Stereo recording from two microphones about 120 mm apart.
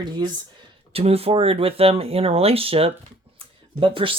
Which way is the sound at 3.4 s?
50° right (ahead or behind).